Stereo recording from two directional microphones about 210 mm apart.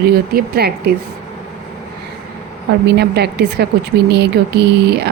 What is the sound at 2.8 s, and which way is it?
Speech, 50° right (ahead or behind).